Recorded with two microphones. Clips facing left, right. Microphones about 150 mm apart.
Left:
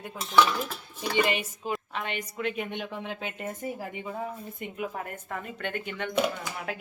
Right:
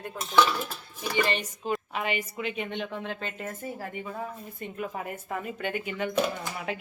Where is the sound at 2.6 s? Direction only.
10° left (ahead or behind).